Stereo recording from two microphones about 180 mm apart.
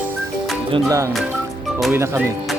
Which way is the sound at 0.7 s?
20° right (ahead or behind).